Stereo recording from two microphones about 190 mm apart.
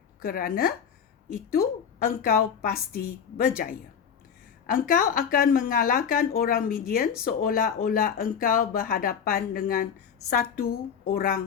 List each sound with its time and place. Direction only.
0.2 s speech: 50° left (ahead or behind)
2.2 s speech: 50° left (ahead or behind)